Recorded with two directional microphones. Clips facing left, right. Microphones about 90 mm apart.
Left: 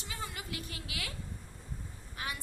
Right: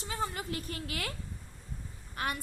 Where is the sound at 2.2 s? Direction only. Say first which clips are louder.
Right 6 dB; 55° right (ahead or behind).